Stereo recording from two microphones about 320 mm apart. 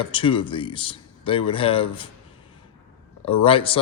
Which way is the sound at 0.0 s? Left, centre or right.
Centre.